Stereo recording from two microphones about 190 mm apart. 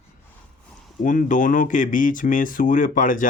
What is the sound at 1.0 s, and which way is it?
A man's voice, 45° left (ahead or behind).